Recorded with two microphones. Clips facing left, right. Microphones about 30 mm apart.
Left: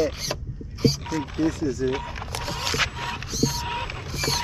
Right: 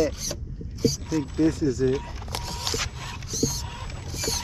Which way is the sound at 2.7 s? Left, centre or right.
Left.